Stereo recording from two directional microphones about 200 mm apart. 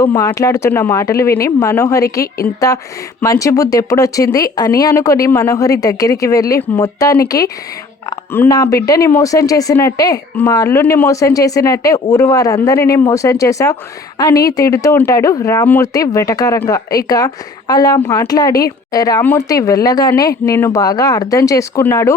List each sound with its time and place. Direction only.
0.0 s speech: 20° left (ahead or behind)
3.2 s speech: 15° left (ahead or behind)